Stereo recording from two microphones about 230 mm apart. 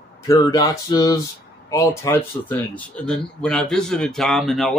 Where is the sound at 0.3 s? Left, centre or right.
Centre.